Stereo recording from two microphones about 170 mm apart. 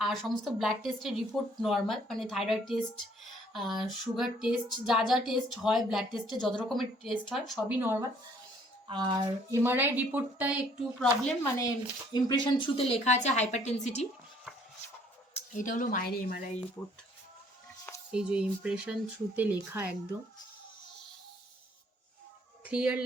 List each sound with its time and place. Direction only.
0.0 s a woman's voice: centre (ahead or behind)
7.8 s speech: 10° right (ahead or behind)
9.5 s speech: 15° right (ahead or behind)
11.0 s a woman's voice: 5° left (ahead or behind)
11.4 s a woman's voice: 20° left (ahead or behind); by 14.1 s 40° left (ahead or behind)
15.3 s speech: 45° left (ahead or behind)
18.1 s a woman's voice: 5° right (ahead or behind)
22.6 s speech: 5° right (ahead or behind)